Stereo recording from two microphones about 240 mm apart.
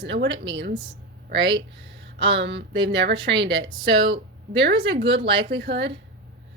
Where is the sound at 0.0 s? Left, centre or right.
Right.